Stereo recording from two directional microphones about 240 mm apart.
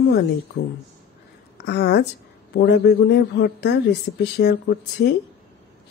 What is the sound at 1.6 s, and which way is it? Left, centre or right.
Speech, left.